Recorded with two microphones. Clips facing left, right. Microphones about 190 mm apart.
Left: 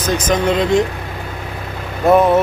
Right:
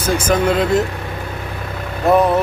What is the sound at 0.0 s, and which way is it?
Speech, 10° right (ahead or behind).